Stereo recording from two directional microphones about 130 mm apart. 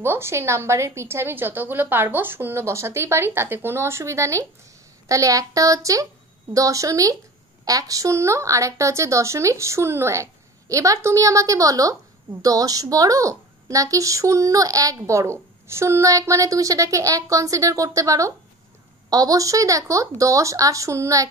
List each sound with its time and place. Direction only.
0.0 s a woman's voice: 20° right (ahead or behind)